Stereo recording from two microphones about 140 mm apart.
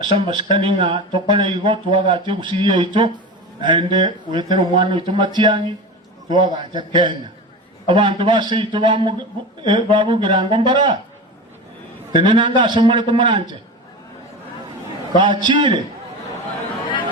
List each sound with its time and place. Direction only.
0.0 s speech: 35° right (ahead or behind)
12.1 s speech: 35° right (ahead or behind)
15.1 s speech: 35° right (ahead or behind)